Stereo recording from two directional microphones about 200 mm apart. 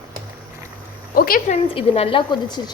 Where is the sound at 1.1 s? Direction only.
45° left (ahead or behind).